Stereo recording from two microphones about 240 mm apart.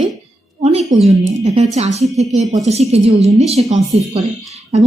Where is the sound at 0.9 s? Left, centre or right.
Right.